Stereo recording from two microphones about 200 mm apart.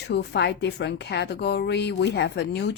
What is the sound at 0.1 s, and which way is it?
Speech, 55° left (ahead or behind).